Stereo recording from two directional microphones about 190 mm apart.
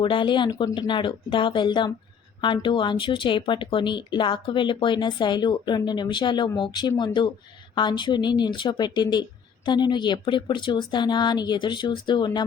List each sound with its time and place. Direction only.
0.0 s speech: 25° left (ahead or behind)